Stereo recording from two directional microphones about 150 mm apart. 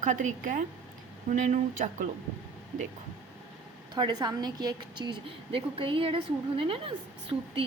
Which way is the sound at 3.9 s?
30° right (ahead or behind).